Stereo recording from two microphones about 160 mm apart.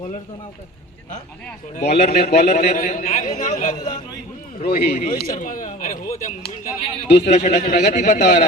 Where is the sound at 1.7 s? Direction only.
50° left (ahead or behind).